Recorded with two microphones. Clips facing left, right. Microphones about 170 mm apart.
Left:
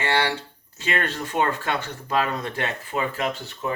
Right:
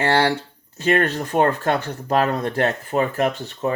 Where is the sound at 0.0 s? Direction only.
40° right (ahead or behind).